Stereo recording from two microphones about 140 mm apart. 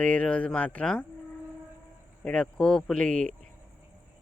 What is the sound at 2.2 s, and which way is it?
Speech, 5° left (ahead or behind).